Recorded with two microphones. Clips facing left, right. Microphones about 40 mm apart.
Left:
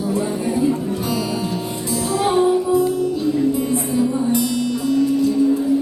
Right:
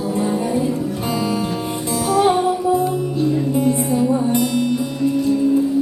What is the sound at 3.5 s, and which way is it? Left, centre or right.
Music, right.